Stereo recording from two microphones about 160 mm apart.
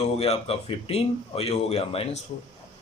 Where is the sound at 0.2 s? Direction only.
40° left (ahead or behind).